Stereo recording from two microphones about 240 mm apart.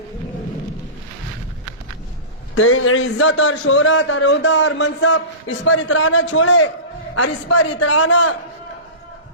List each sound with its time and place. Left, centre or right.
2.6 s a man's voice: left
7.2 s a man's voice: left